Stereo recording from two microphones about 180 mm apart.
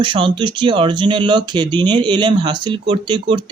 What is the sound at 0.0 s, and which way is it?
Speech, 25° right (ahead or behind).